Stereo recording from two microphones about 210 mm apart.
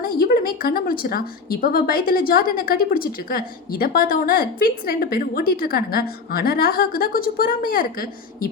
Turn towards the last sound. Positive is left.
turn(degrees=45)  # may be behind; listen again after turning